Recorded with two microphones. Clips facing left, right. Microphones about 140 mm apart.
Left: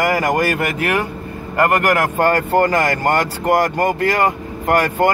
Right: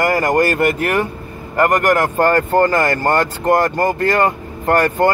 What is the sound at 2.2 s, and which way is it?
Speech, 10° left (ahead or behind).